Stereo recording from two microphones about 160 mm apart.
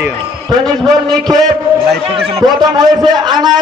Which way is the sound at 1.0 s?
25° right (ahead or behind).